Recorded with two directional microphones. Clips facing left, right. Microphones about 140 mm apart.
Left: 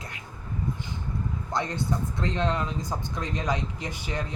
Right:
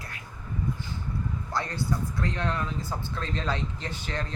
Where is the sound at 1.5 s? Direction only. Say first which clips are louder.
Left 2 dB; 20° left (ahead or behind).